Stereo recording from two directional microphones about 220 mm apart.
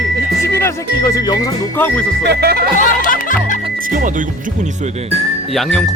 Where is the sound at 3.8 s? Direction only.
40° right (ahead or behind).